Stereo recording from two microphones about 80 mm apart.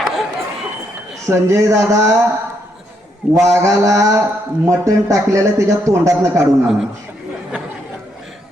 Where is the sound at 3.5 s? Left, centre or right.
Right.